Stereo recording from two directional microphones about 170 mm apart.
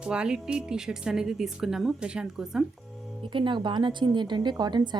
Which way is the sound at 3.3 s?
30° right (ahead or behind).